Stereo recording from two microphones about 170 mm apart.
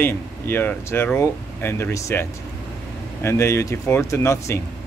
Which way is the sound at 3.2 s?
15° left (ahead or behind).